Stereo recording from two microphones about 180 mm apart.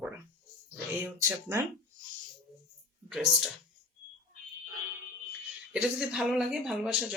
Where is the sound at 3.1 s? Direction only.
5° right (ahead or behind).